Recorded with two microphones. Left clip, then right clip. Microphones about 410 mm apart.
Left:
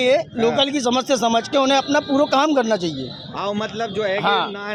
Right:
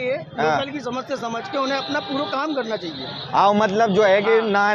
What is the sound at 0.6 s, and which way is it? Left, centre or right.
A man's voice, left.